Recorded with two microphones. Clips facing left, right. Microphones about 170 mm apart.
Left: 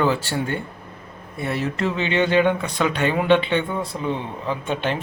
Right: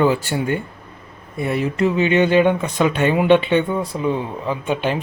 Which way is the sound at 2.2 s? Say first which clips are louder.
Right 1 dB; 15° right (ahead or behind).